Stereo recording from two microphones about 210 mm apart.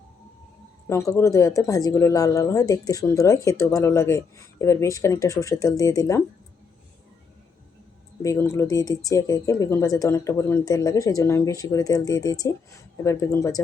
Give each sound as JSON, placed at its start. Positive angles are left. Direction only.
{"t": 0.9, "sound": "speech", "side_deg": 15}
{"t": 8.2, "sound": "speech", "side_deg": 15}